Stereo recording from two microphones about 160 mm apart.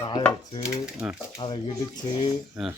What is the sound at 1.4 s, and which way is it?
Speech, 30° left (ahead or behind).